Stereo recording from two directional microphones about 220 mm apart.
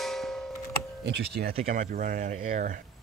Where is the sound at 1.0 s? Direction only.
50° right (ahead or behind).